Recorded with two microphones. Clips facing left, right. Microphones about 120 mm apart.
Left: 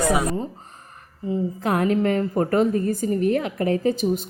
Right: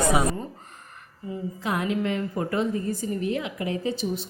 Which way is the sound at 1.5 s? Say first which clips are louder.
Left 5 dB; 50° left (ahead or behind).